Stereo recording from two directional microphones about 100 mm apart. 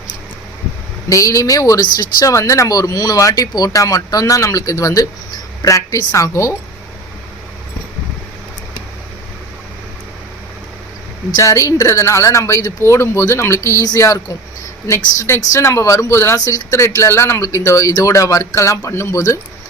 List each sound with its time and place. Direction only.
1.1 s speech: 35° left (ahead or behind)
11.3 s speech: 35° left (ahead or behind)